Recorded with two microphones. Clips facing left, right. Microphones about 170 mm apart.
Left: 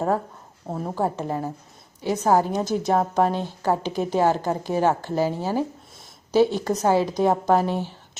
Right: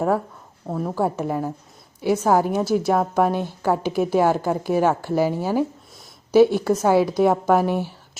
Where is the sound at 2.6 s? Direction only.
5° right (ahead or behind).